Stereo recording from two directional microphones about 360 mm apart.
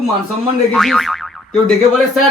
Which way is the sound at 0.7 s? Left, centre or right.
Centre.